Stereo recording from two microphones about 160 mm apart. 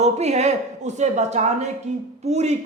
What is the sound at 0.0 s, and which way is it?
A woman's voice, 45° right (ahead or behind).